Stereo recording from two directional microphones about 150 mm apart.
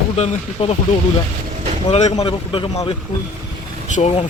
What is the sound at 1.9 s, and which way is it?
Speech, 45° left (ahead or behind).